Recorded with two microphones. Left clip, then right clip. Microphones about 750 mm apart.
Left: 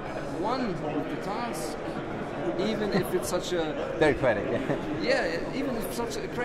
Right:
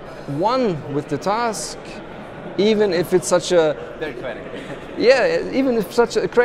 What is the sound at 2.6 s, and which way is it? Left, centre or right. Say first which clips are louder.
Speech: right 14 dB; right.